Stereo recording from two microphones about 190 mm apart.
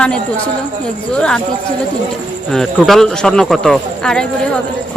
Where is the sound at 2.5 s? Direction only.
Centre (ahead or behind).